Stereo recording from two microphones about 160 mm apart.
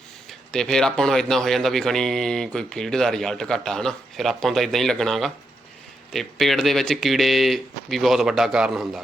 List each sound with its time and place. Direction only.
0.3 s a man's voice: 5° left (ahead or behind)